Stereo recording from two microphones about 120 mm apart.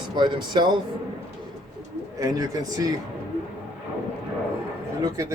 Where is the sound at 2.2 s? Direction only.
30° right (ahead or behind).